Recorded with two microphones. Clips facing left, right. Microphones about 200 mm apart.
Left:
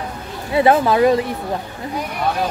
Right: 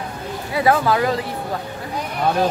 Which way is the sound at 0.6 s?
25° left (ahead or behind).